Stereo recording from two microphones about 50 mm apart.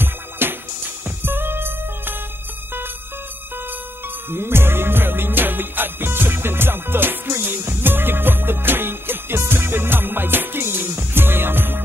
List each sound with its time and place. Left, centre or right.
0.0 s music: right
4.3 s music: right